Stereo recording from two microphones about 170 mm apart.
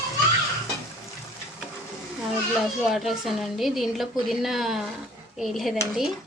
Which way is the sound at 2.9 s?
Centre (ahead or behind).